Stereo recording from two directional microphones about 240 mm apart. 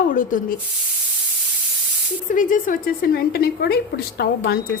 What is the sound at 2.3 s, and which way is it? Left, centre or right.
A woman's voice, left.